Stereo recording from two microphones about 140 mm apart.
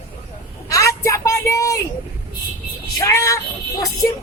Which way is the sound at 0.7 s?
20° left (ahead or behind).